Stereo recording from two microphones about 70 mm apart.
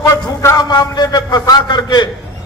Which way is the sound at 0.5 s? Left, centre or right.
Left.